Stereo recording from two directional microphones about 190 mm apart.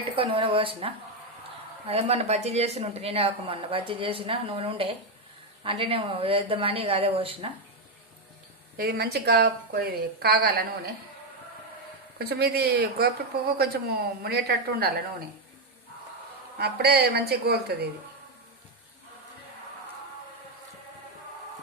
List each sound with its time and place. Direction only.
0.2 s a woman's voice: 25° right (ahead or behind)
8.8 s a woman's voice: 55° right (ahead or behind)
12.2 s a woman's voice: 55° right (ahead or behind)
16.6 s a woman's voice: 55° right (ahead or behind)